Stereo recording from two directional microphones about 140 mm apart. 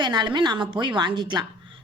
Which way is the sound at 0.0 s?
30° right (ahead or behind).